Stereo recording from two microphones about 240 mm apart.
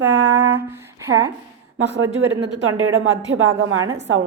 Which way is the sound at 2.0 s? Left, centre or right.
Right.